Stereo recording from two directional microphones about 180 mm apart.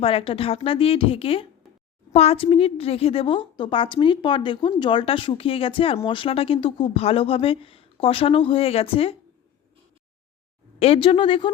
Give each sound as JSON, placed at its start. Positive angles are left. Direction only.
{"t": 0.0, "sound": "a woman's voice", "side_deg": 30}
{"t": 10.8, "sound": "a woman's voice", "side_deg": 35}